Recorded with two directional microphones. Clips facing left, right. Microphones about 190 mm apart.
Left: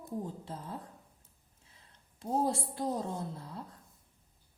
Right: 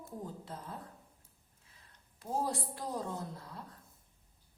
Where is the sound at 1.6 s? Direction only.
25° left (ahead or behind).